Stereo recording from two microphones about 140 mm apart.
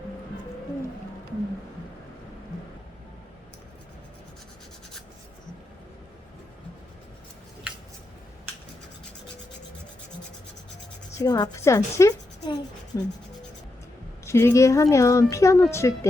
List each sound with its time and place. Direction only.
11.2 s a woman's voice: 25° left (ahead or behind)
14.3 s speech: 20° left (ahead or behind)